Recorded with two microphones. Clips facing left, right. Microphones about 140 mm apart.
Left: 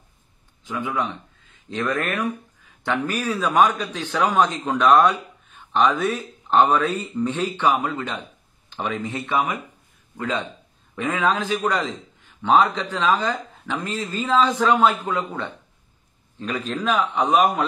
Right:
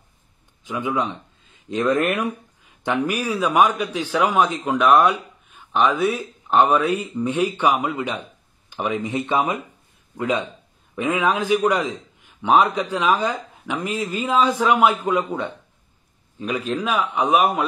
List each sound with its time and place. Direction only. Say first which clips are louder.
0.7 s a man's voice: right 2 dB; 20° right (ahead or behind)